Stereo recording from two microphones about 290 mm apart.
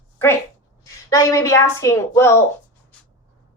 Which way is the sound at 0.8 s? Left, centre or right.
Centre.